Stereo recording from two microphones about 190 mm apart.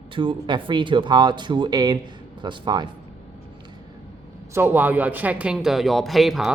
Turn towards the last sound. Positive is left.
turn(degrees=0)  # may be behind; listen again after turning